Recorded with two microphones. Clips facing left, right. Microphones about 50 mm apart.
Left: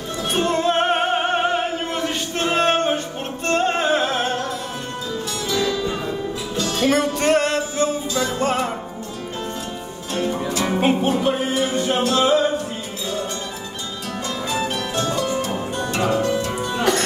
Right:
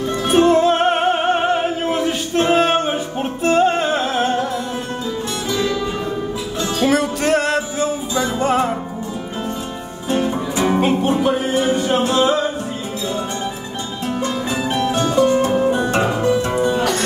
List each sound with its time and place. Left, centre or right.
0.3 s music: centre
6.8 s music: centre
10.0 s music: centre
10.8 s music: centre
14.2 s music: right